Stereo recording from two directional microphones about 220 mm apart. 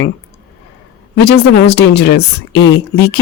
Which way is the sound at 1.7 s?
50° left (ahead or behind).